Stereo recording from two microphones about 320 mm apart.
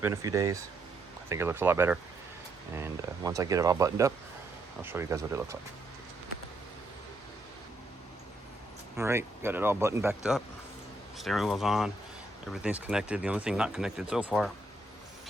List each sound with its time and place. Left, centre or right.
0.0 s speech: centre
9.0 s speech: centre